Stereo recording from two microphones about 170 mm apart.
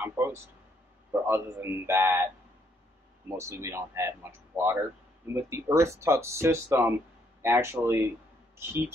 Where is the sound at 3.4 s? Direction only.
15° right (ahead or behind).